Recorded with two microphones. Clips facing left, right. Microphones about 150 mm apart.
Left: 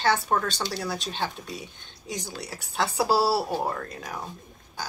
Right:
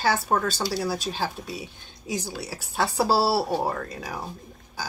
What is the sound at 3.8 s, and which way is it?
Speech, centre (ahead or behind).